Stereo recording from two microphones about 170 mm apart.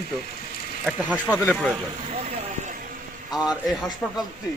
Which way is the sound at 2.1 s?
45° right (ahead or behind).